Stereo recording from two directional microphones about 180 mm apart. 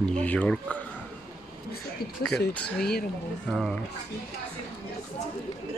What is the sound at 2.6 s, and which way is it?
Speech, 5° left (ahead or behind).